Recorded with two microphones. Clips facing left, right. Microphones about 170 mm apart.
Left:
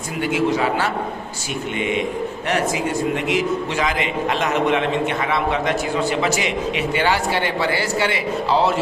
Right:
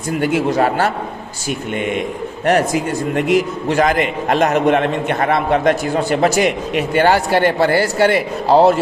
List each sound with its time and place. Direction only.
0.2 s a man's voice: 50° right (ahead or behind)
2.5 s a man's voice: 45° right (ahead or behind)